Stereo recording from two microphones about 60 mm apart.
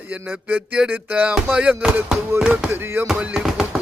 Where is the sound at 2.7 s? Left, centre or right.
Right.